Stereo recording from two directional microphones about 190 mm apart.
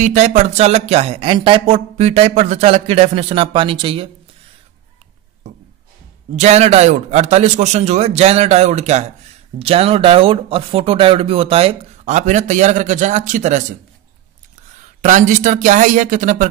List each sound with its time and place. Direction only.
0.0 s speech: 40° right (ahead or behind)
6.3 s speech: 35° right (ahead or behind)
15.0 s speech: 40° right (ahead or behind)